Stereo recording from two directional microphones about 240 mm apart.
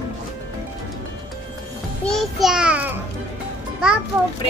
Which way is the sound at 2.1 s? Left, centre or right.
Centre.